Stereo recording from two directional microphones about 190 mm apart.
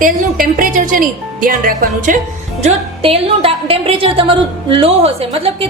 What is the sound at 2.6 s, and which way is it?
A woman's voice, 35° right (ahead or behind).